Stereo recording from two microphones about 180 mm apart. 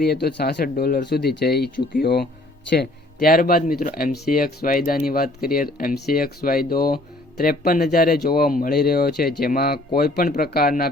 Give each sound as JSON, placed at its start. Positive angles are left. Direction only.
{"t": 0.0, "sound": "speech", "side_deg": 60}